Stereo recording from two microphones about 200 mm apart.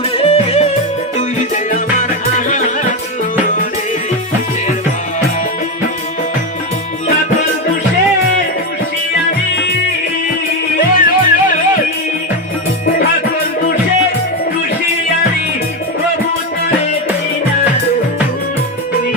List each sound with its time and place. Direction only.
0.2 s music: 30° left (ahead or behind)
10.8 s music: 40° left (ahead or behind)